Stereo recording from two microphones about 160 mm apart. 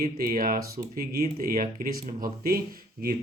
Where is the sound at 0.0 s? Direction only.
65° right (ahead or behind).